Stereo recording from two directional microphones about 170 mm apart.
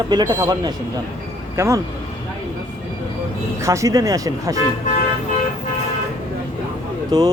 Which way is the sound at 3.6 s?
20° right (ahead or behind).